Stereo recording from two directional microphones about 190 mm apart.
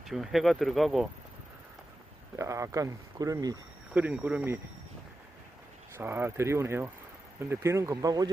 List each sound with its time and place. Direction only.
0.0 s speech: centre (ahead or behind)
2.3 s speech: 15° right (ahead or behind)
3.9 s speech: 10° right (ahead or behind)
6.0 s speech: 10° right (ahead or behind)